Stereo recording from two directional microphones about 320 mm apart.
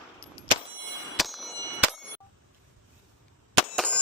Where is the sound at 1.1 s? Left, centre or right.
Centre.